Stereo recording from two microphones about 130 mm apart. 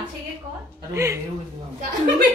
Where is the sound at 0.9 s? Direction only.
20° right (ahead or behind).